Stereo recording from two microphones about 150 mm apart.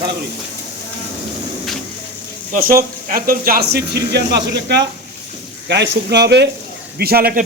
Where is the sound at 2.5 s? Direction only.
75° right (ahead or behind).